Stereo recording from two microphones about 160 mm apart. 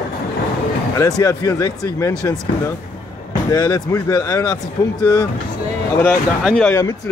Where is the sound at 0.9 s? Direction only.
20° left (ahead or behind).